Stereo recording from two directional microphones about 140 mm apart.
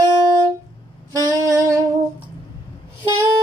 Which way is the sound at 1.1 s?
25° right (ahead or behind).